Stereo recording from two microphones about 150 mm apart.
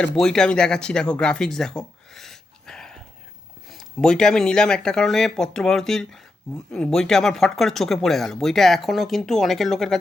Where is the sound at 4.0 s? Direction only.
5° left (ahead or behind).